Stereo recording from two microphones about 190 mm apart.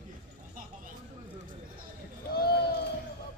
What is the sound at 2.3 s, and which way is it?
Run, 55° left (ahead or behind).